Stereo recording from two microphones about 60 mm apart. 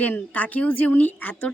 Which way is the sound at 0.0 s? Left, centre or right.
Left.